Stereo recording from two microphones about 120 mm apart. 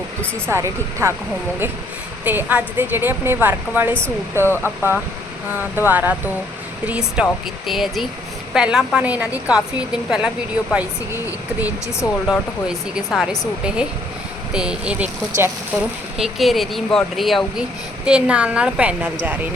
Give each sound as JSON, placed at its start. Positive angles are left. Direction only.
{"t": 0.4, "sound": "speech", "side_deg": -20}
{"t": 2.2, "sound": "speech", "side_deg": -15}
{"t": 12.3, "sound": "speech", "side_deg": -5}
{"t": 14.5, "sound": "speech", "side_deg": -5}